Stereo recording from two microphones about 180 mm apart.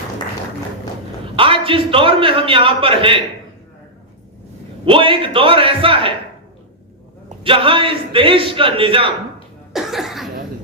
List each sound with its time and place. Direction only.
1.4 s a man's voice: 30° right (ahead or behind)
4.9 s a man's voice: 30° right (ahead or behind)
7.4 s a man's voice: 30° right (ahead or behind)
9.7 s cough: centre (ahead or behind)